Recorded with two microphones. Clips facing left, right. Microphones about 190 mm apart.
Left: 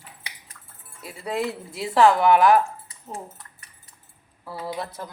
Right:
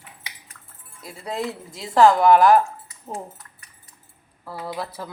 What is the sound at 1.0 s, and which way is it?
A woman's voice, 5° left (ahead or behind).